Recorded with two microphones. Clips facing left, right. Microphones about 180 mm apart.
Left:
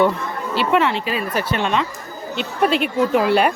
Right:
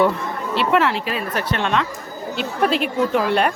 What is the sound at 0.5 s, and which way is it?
A woman's voice, centre (ahead or behind).